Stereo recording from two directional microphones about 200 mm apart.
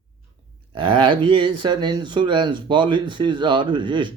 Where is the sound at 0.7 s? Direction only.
25° right (ahead or behind).